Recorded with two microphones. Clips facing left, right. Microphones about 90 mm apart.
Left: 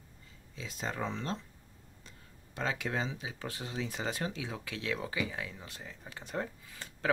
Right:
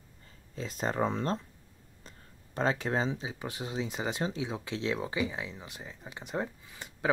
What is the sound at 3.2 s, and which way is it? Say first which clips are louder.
Speech: right 3 dB; 20° right (ahead or behind).